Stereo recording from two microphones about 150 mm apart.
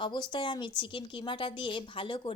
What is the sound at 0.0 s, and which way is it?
Speech, 30° left (ahead or behind).